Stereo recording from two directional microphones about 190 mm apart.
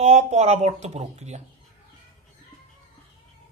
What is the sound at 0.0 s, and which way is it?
Speech, 35° right (ahead or behind).